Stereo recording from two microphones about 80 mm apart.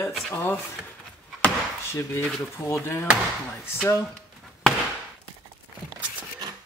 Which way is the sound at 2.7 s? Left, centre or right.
Left.